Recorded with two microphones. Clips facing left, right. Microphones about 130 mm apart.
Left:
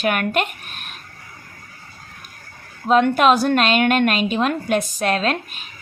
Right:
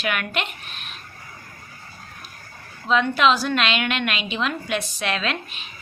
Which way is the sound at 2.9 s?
50° left (ahead or behind).